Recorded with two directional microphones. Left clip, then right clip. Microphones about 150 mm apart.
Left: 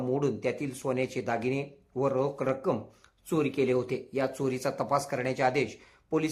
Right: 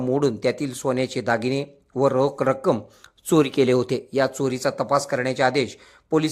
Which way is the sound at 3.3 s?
50° right (ahead or behind).